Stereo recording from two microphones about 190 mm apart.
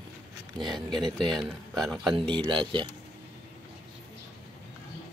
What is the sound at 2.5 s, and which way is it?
Speech, 25° right (ahead or behind).